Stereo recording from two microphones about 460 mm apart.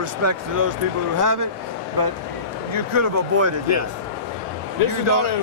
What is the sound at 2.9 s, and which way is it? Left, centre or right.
Speech, right.